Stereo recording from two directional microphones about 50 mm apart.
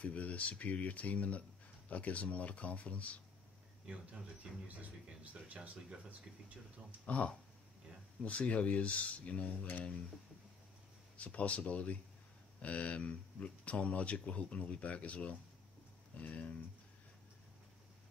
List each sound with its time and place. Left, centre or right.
0.0 s speech: left
3.8 s speech: right
7.1 s speech: left
11.1 s speech: left